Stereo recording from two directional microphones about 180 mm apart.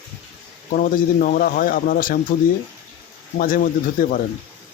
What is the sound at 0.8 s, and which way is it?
Speech, 50° left (ahead or behind).